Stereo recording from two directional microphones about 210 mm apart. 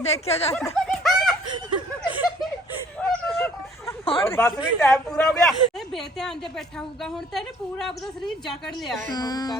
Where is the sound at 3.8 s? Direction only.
25° left (ahead or behind).